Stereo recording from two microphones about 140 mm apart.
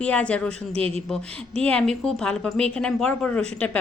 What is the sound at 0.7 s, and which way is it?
Speech, 45° right (ahead or behind).